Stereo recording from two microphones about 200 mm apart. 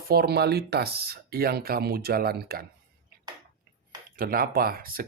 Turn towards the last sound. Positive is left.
turn(degrees=-45)  # may be behind; listen again after turning